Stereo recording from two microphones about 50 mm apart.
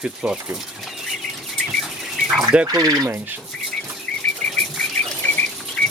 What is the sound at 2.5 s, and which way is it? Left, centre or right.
Speech, right.